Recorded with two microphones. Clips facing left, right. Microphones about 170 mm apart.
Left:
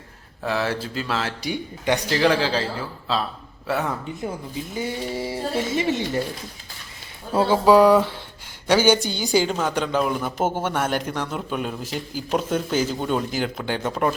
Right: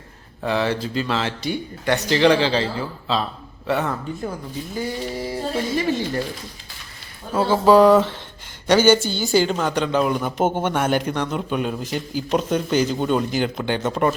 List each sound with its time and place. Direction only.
0.4 s a man's voice: 5° left (ahead or behind)
2.0 s a man's voice: 5° left (ahead or behind)
4.2 s speech: 20° left (ahead or behind)
7.5 s a man's voice: 10° left (ahead or behind)